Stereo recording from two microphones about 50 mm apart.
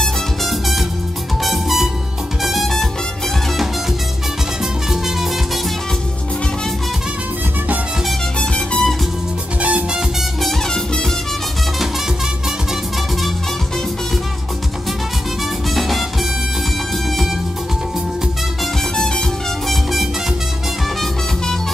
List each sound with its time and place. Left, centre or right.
0.0 s music: centre
8.4 s music: centre
9.6 s music: right
10.4 s music: centre
15.7 s music: centre
18.9 s music: centre
19.7 s music: centre